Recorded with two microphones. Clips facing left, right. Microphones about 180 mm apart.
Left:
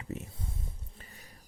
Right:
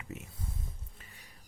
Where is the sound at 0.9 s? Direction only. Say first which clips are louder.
Left 3 dB; 35° left (ahead or behind).